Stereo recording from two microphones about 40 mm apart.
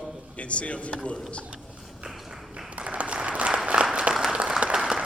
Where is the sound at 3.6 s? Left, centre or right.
Right.